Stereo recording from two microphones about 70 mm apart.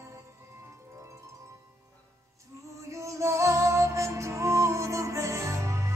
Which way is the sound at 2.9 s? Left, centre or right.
Right.